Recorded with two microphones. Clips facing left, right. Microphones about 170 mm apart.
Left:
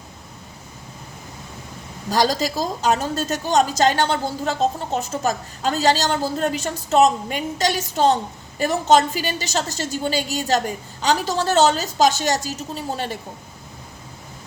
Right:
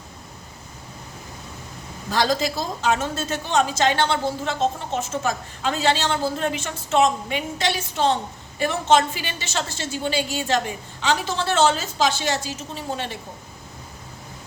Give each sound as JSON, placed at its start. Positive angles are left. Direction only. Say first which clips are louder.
{"t": 2.0, "sound": "a woman's voice", "louder": "left 2 dB", "side_deg": 40}